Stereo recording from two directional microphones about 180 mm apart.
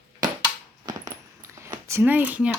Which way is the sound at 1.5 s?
15° right (ahead or behind).